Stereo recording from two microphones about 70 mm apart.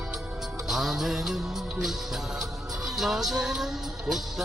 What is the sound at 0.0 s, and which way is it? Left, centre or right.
Music, centre.